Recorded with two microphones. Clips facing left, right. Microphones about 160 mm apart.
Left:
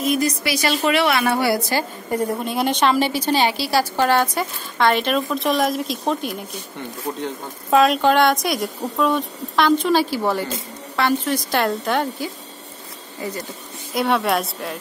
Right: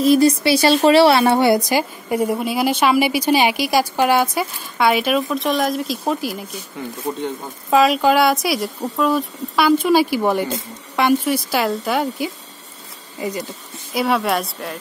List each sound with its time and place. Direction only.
0.0 s a woman's voice: 30° right (ahead or behind); by 13.5 s 15° right (ahead or behind)
13.9 s a woman's voice: centre (ahead or behind)